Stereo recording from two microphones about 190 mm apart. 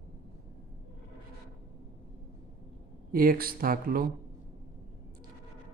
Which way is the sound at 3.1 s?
50° right (ahead or behind).